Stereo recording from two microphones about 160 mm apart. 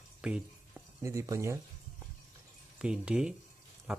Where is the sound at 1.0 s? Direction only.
20° right (ahead or behind).